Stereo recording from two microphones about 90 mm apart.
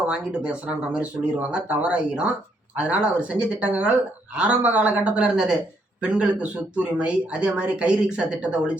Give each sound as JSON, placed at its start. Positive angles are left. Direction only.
{"t": 0.1, "sound": "speech", "side_deg": -10}